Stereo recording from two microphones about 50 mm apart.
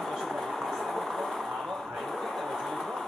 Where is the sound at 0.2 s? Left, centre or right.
Centre.